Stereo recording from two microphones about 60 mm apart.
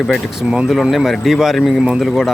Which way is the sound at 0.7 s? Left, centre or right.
Centre.